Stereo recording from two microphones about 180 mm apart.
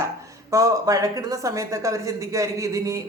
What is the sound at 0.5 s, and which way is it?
Speech, 20° right (ahead or behind).